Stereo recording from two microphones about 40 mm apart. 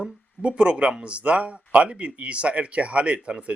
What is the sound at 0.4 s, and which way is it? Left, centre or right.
Speech, right.